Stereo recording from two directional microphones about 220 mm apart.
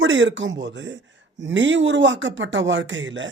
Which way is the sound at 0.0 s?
55° right (ahead or behind).